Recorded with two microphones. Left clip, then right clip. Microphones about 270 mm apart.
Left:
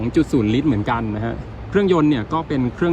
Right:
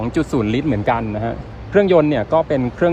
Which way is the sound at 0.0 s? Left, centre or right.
Centre.